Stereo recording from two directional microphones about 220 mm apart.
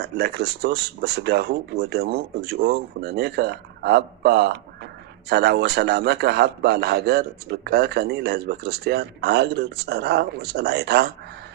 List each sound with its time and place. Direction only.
0.0 s a man's voice: 50° right (ahead or behind)